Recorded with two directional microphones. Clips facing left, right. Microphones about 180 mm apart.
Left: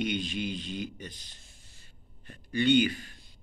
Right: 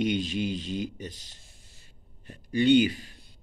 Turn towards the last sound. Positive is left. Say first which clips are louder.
# right 3 dB
turn(degrees=-35)  # may be behind; listen again after turning